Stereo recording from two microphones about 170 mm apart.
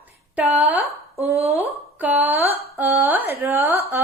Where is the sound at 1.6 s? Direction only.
10° right (ahead or behind).